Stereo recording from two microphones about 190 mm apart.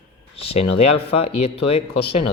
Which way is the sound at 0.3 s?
30° left (ahead or behind).